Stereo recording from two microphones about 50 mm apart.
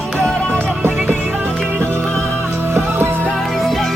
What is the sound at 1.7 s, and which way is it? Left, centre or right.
Music, right.